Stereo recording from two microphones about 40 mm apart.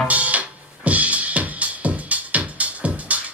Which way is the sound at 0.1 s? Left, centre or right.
Right.